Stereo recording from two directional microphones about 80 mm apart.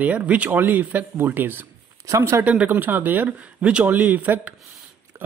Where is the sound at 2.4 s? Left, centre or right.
Right.